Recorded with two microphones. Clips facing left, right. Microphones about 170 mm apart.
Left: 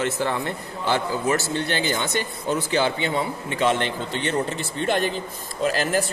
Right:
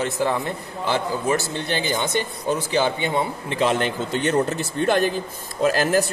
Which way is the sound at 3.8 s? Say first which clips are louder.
Right 3 dB; 45° right (ahead or behind).